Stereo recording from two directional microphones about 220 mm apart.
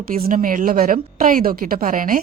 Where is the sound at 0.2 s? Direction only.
40° right (ahead or behind).